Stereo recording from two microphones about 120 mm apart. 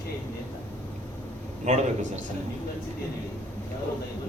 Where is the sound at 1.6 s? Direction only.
75° right (ahead or behind).